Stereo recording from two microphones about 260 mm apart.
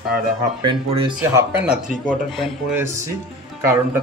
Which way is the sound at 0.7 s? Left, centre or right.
Centre.